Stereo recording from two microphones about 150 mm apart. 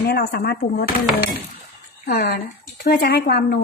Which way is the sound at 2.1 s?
90° left.